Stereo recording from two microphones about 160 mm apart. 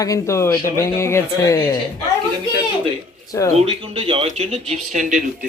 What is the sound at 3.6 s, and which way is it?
Speech, 35° right (ahead or behind).